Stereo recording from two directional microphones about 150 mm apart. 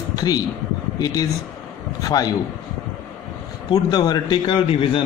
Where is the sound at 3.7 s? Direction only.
30° left (ahead or behind).